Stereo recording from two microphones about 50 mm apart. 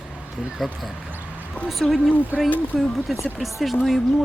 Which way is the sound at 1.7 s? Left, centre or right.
Centre.